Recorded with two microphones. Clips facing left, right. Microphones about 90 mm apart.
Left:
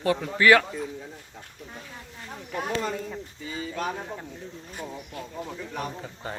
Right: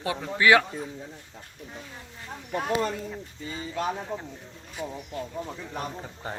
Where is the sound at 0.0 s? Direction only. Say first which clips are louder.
Left 2 dB; 20° right (ahead or behind).